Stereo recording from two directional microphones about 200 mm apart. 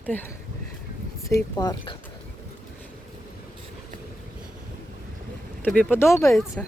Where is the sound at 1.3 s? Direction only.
20° left (ahead or behind).